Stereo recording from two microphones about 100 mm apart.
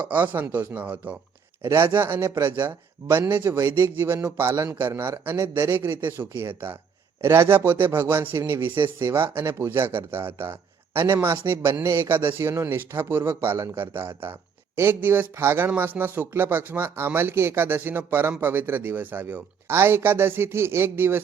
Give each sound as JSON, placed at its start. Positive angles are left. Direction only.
{"t": 0.0, "sound": "speech", "side_deg": -15}
{"t": 1.6, "sound": "speech", "side_deg": -25}
{"t": 3.6, "sound": "speech", "side_deg": -35}
{"t": 4.0, "sound": "speech", "side_deg": -20}